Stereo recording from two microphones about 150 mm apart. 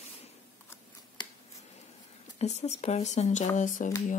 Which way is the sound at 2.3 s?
50° left (ahead or behind).